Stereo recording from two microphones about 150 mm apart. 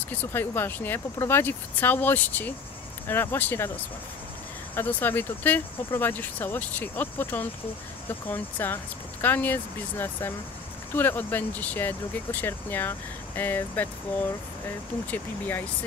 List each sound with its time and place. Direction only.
0.1 s speech: 15° left (ahead or behind)
4.7 s speech: 15° left (ahead or behind)
15.0 s speech: 10° left (ahead or behind)